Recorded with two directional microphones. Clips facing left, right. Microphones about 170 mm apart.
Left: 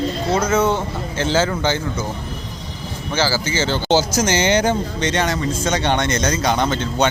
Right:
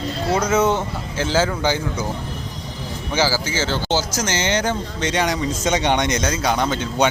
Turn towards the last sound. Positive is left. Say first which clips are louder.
# left 1 dB
turn(degrees=-10)  # may be behind; listen again after turning